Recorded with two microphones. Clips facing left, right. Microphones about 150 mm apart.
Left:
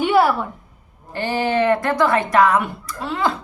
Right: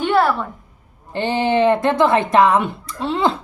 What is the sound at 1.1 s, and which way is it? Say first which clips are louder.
Speech: right 2 dB; 20° right (ahead or behind).